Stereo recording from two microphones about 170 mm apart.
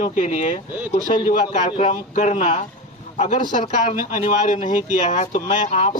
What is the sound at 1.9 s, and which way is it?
Speech, 45° left (ahead or behind).